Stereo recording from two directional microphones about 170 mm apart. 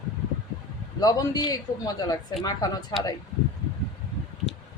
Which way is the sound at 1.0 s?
20° left (ahead or behind).